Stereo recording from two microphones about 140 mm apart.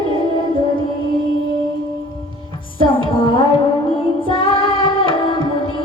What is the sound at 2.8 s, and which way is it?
Music, 35° left (ahead or behind).